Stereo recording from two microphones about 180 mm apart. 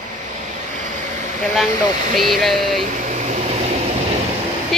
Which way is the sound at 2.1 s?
Centre (ahead or behind).